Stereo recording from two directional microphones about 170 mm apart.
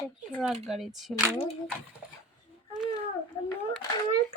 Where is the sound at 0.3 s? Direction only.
10° left (ahead or behind).